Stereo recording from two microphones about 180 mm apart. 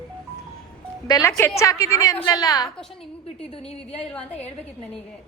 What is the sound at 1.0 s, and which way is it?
A woman's voice, 20° left (ahead or behind).